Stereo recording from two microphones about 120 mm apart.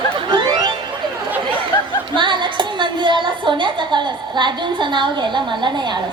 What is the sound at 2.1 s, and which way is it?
A woman's voice, 40° right (ahead or behind).